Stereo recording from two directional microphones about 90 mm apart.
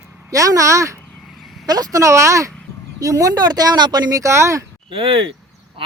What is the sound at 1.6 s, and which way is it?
Speech, 45° right (ahead or behind).